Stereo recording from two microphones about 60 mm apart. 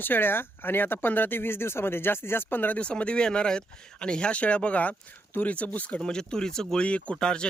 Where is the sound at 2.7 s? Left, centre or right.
Centre.